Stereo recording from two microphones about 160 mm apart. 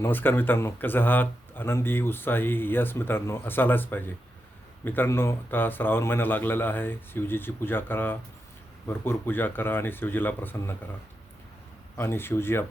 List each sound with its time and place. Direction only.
0.0 s speech: 10° left (ahead or behind)
11.9 s speech: 15° left (ahead or behind)